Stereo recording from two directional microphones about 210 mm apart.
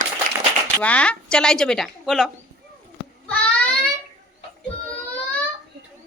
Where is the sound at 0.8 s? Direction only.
5° left (ahead or behind).